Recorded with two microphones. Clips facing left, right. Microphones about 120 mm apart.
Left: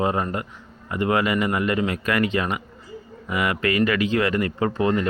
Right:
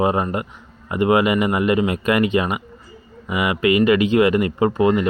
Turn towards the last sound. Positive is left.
turn(degrees=-15)  # may be behind; listen again after turning